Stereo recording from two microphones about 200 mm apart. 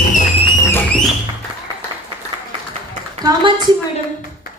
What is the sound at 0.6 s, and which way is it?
Music, 10° left (ahead or behind).